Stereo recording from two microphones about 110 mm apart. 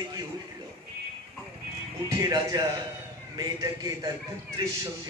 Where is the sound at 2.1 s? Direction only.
35° right (ahead or behind).